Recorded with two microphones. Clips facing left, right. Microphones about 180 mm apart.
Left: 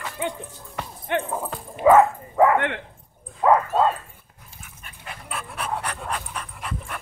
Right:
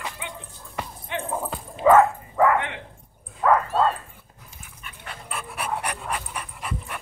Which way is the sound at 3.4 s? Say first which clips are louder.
Left 2 dB; 25° left (ahead or behind).